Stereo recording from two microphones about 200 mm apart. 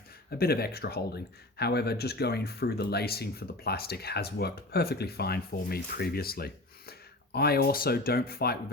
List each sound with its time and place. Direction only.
0.3 s speech: 50° left (ahead or behind)